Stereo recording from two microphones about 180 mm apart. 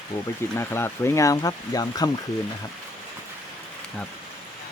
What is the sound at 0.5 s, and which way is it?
Speech, 15° left (ahead or behind).